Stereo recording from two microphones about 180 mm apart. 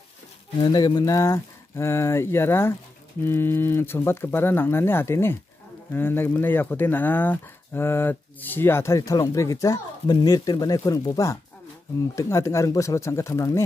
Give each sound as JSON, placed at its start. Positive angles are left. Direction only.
{"t": 0.6, "sound": "speech", "side_deg": 20}